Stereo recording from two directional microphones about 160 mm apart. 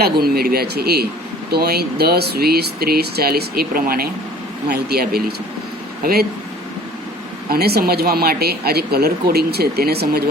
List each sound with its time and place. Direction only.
0.0 s speech: 75° right (ahead or behind)
4.7 s speech: 80° right
7.5 s speech: 75° right (ahead or behind)